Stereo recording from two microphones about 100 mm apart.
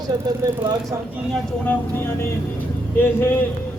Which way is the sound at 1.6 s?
25° left (ahead or behind).